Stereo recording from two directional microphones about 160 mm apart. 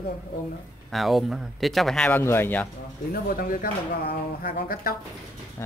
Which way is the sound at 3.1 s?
65° left (ahead or behind).